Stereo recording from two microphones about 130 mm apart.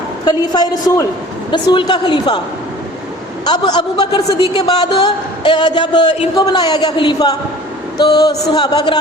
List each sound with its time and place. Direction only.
0.3 s a man's voice: 30° left (ahead or behind)
3.4 s a man's voice: 35° left (ahead or behind)